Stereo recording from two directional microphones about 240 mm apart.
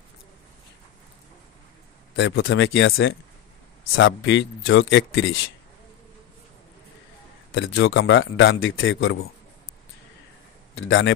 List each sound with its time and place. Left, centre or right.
2.1 s a man's voice: left
7.5 s a man's voice: left
10.7 s a man's voice: left